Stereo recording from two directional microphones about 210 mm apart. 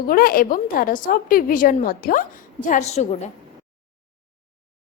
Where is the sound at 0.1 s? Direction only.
45° left (ahead or behind).